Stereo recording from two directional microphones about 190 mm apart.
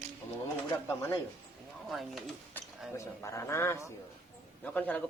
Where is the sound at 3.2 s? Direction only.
15° left (ahead or behind).